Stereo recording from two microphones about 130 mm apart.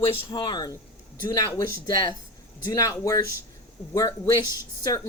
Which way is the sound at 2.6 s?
25° left (ahead or behind).